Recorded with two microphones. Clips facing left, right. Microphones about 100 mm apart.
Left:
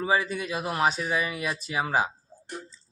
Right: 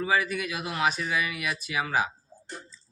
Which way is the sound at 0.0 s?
30° left (ahead or behind).